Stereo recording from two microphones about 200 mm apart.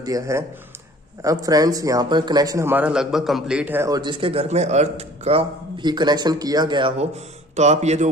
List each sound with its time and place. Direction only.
0.0 s a man's voice: 15° right (ahead or behind); by 8.1 s 35° right (ahead or behind)